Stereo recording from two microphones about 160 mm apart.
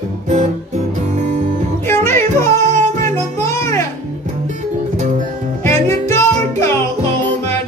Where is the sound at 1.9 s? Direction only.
15° left (ahead or behind).